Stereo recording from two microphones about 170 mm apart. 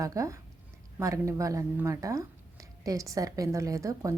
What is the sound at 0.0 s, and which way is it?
Speech, 20° right (ahead or behind).